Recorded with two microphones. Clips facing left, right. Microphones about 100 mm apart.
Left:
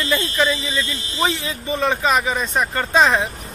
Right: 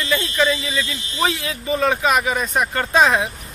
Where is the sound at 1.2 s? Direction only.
Centre (ahead or behind).